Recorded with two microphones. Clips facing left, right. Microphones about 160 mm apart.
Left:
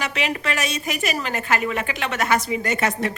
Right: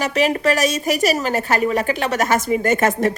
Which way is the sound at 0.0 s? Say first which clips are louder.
Right 8 dB; 40° right (ahead or behind).